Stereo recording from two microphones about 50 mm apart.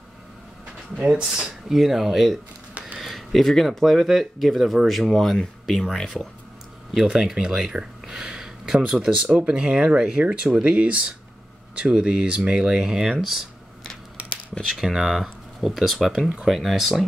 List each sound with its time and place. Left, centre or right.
0.9 s speech: centre
7.0 s speech: centre
10.2 s speech: right
11.9 s speech: centre
14.8 s speech: centre
16.1 s speech: centre